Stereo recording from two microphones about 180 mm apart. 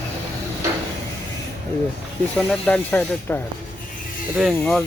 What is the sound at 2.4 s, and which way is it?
Speech, 5° left (ahead or behind).